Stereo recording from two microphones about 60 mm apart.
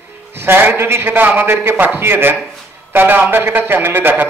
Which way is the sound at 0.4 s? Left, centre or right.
Right.